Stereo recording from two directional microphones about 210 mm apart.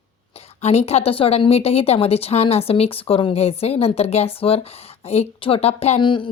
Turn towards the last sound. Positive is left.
turn(degrees=25)  # may be behind; listen again after turning